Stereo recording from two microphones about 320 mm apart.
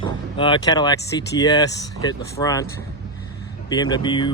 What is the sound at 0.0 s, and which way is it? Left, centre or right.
Speech, centre.